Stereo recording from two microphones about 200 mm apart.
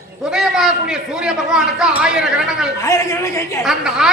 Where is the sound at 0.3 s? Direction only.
Centre (ahead or behind).